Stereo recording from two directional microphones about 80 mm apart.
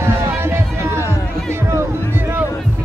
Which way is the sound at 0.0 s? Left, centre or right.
Right.